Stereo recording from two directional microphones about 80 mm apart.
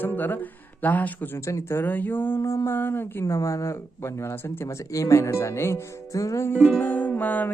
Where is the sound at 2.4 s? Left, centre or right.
Left.